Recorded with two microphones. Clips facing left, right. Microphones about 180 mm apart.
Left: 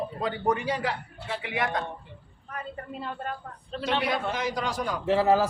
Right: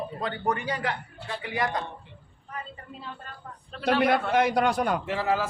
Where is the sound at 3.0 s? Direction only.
60° left (ahead or behind).